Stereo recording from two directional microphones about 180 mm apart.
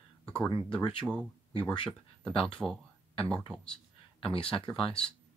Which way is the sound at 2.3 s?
30° left (ahead or behind).